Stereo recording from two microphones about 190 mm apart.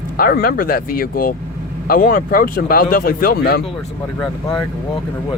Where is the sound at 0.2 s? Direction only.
50° left (ahead or behind).